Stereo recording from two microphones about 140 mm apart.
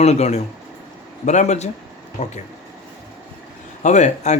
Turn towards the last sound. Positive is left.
turn(degrees=55)  # may be behind; listen again after turning